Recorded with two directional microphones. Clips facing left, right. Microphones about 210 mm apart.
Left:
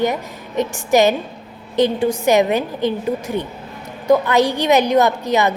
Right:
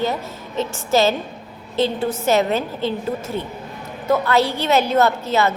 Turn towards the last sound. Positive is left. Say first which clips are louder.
# left 1 dB
turn(degrees=15)  # may be behind; listen again after turning